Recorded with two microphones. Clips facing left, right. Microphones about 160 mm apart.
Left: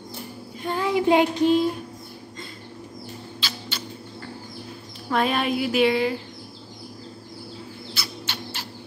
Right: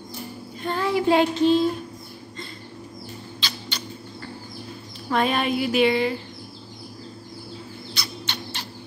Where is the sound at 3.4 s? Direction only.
5° left (ahead or behind).